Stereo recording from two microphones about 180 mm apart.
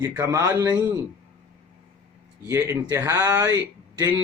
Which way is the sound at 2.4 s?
15° right (ahead or behind).